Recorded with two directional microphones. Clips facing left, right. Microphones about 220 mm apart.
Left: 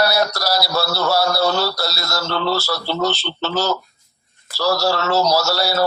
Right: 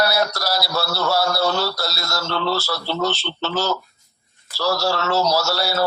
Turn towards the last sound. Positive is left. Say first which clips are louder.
# left 2 dB
turn(degrees=40)  # may be behind; listen again after turning